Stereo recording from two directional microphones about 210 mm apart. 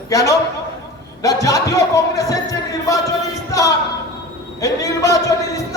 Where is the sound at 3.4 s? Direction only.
15° left (ahead or behind).